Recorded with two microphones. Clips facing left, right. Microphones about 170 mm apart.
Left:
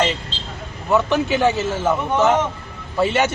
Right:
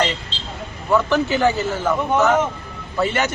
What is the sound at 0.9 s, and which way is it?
A man's voice, 20° left (ahead or behind).